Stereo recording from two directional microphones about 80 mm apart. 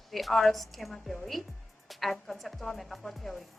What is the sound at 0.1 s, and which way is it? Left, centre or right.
Speech, centre.